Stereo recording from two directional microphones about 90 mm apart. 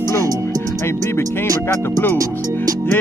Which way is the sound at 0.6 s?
30° left (ahead or behind).